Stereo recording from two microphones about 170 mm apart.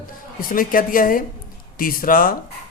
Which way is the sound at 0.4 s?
55° left (ahead or behind).